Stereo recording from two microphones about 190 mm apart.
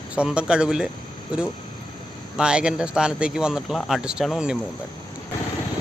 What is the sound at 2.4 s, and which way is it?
Speech, 5° right (ahead or behind).